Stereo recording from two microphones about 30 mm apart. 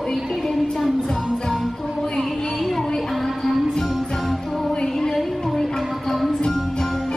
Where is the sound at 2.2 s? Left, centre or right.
Centre.